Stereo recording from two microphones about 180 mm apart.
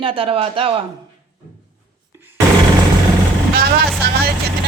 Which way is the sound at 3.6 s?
60° right (ahead or behind).